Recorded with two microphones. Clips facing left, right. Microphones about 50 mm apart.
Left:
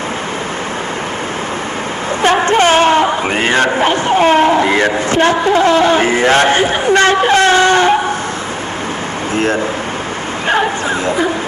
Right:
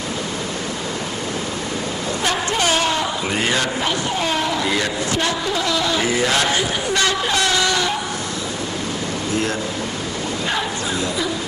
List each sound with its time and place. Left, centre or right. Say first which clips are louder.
2.2 s a man's voice: left 10 dB; left
9.3 s a man's voice: left 9 dB; left